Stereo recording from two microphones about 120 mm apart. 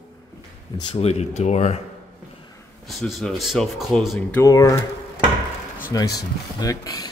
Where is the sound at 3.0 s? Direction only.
Centre (ahead or behind).